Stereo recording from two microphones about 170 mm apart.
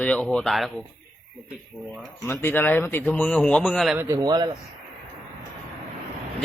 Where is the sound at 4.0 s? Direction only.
20° right (ahead or behind).